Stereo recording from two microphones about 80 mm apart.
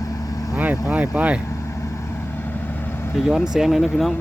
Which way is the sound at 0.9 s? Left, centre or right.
Centre.